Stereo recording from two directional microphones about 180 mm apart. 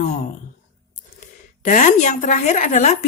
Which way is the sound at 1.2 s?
45° left (ahead or behind).